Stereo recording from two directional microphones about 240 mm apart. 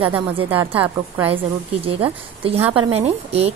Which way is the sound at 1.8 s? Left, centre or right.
Right.